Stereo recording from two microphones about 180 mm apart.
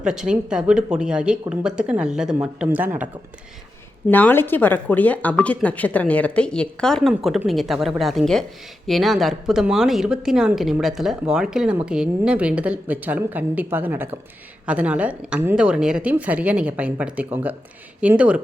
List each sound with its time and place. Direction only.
0.0 s a woman's voice: 5° right (ahead or behind)
4.1 s a woman's voice: 10° left (ahead or behind); by 18.3 s 5° right (ahead or behind)